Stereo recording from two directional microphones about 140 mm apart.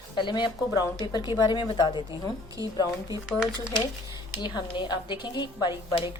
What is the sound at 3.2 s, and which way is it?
Speech, 5° right (ahead or behind).